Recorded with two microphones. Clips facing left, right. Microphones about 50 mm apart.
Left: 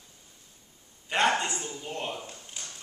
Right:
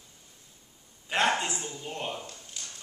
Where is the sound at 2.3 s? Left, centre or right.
Left.